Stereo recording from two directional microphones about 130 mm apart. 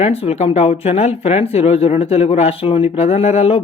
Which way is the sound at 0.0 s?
50° left (ahead or behind).